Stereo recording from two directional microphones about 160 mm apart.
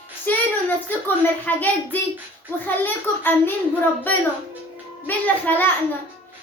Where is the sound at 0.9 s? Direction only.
10° left (ahead or behind).